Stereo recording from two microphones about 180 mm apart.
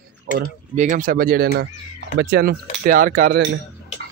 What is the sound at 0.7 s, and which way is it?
Speech, 45° right (ahead or behind).